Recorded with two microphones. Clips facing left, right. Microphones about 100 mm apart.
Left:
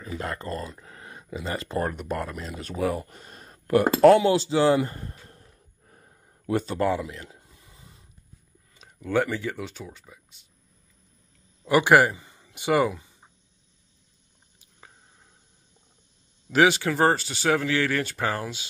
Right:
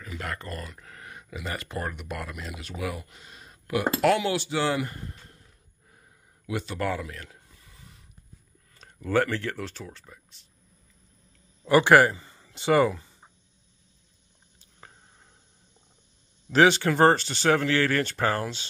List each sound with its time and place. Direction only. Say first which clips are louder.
0.0 s speech: left 3 dB; 30° left (ahead or behind)
6.9 s a sound: left 4 dB; 20° left (ahead or behind)
8.7 s speech: even; 5° left (ahead or behind)
11.6 s speech: even; 15° left (ahead or behind)
16.5 s speech: right 1 dB; 5° left (ahead or behind)